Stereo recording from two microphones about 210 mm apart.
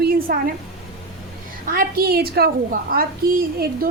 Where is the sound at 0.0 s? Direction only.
45° right (ahead or behind).